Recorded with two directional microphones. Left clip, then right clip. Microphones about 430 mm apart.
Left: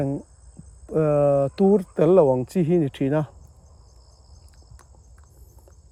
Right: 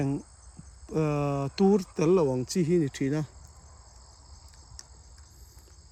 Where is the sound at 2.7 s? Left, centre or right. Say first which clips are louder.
Left 5 dB; centre.